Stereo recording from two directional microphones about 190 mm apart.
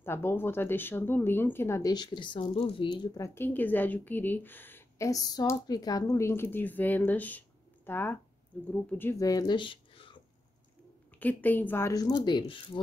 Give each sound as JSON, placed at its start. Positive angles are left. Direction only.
{"t": 0.0, "sound": "a woman's voice", "side_deg": 10}
{"t": 3.3, "sound": "a woman's voice", "side_deg": 10}
{"t": 11.1, "sound": "a woman's voice", "side_deg": 10}